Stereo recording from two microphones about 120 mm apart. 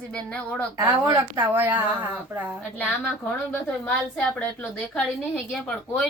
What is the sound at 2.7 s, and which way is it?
A woman's voice, 15° left (ahead or behind).